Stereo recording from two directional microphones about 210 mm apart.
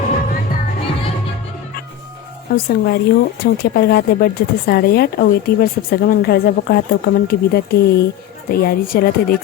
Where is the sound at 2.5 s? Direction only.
50° left (ahead or behind).